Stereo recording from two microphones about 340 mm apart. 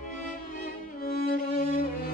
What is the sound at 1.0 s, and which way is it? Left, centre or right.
Music, left.